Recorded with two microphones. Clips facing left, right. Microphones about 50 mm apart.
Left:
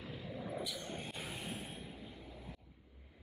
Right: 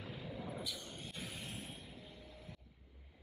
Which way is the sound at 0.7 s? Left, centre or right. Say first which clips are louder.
Left 6 dB; left.